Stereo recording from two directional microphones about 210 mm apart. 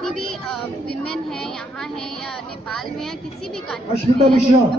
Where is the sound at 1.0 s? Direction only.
Centre (ahead or behind).